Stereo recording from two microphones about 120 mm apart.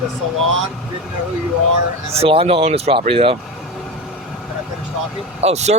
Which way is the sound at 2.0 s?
55° right (ahead or behind).